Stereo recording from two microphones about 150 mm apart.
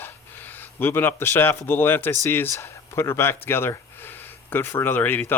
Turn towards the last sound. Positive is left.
turn(degrees=15)  # may be behind; listen again after turning